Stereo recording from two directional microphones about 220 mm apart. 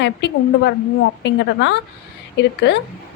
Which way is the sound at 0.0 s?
50° left (ahead or behind).